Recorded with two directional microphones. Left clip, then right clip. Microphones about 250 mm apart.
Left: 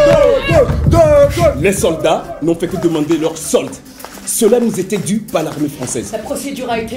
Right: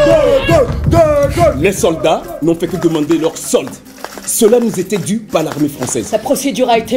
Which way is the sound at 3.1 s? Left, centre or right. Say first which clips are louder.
Right 1 dB; right.